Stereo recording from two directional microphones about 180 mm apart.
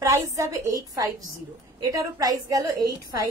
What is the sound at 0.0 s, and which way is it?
A woman's voice, 15° right (ahead or behind).